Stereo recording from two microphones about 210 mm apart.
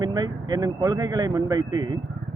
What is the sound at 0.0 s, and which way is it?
Speech, 20° right (ahead or behind).